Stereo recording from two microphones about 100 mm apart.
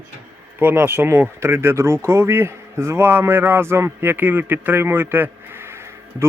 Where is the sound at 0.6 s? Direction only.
20° right (ahead or behind).